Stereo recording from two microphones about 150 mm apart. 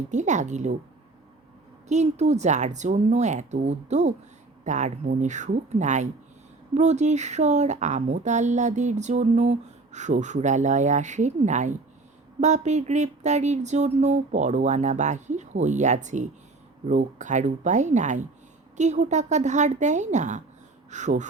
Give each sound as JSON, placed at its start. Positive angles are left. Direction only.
{"t": 0.1, "sound": "speech", "side_deg": -50}
{"t": 1.9, "sound": "speech", "side_deg": -50}